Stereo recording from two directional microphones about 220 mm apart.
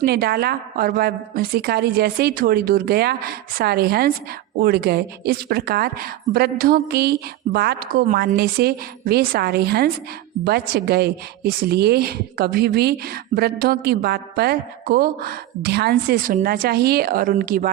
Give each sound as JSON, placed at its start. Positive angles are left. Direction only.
{"t": 0.0, "sound": "a woman's voice", "side_deg": -45}